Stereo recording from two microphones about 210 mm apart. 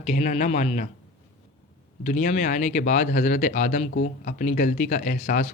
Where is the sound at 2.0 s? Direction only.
35° left (ahead or behind).